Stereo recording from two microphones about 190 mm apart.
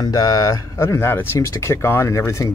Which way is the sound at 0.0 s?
20° left (ahead or behind).